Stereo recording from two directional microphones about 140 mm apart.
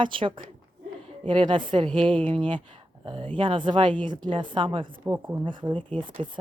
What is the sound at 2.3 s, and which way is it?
A woman's voice, 35° right (ahead or behind).